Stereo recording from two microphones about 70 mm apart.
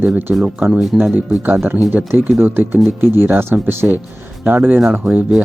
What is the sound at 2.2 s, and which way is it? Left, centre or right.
Speech, right.